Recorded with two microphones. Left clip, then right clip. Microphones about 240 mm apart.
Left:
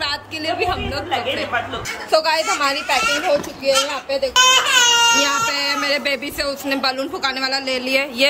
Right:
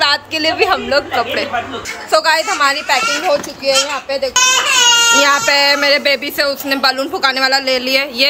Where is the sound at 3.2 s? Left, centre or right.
Right.